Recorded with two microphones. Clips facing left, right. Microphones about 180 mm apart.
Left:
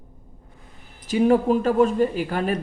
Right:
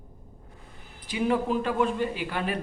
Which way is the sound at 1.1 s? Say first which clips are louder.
Left 8 dB; 45° left (ahead or behind).